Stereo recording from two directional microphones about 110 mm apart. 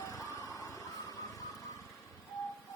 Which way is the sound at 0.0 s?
30° left (ahead or behind).